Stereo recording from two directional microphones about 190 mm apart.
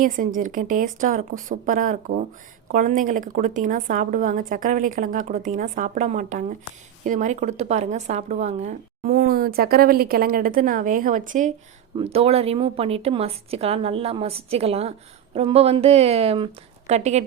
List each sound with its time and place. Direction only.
0.3 s speech: 45° right (ahead or behind)
11.9 s speech: 30° right (ahead or behind)